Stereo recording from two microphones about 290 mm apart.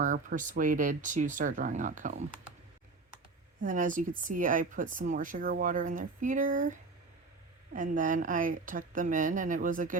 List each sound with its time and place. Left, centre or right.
0.0 s speech: right
3.6 s speech: right